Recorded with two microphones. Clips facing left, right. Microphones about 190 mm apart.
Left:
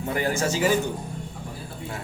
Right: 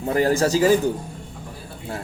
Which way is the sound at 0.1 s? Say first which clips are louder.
Right 7 dB; 35° right (ahead or behind).